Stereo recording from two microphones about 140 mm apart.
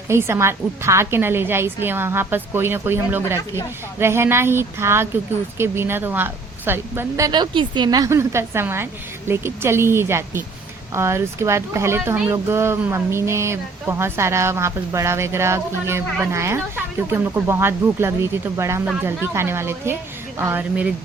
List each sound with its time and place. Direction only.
0.1 s a woman's voice: 20° right (ahead or behind)
7.3 s a child's voice: 30° right (ahead or behind); by 20.9 s 10° right (ahead or behind)